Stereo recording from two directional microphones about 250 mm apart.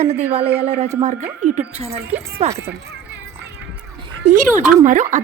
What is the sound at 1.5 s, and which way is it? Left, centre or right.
Speech, right.